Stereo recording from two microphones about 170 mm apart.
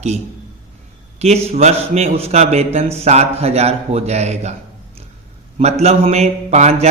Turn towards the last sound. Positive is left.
turn(degrees=-40)  # may be behind; listen again after turning